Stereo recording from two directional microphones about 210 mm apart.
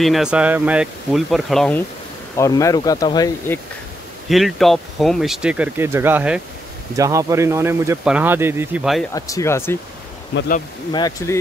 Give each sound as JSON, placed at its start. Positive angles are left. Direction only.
{"t": 0.0, "sound": "speech", "side_deg": 0}
{"t": 4.3, "sound": "speech", "side_deg": 0}
{"t": 9.1, "sound": "speech", "side_deg": 15}
{"t": 10.3, "sound": "speech", "side_deg": 55}
{"t": 10.9, "sound": "speech", "side_deg": 20}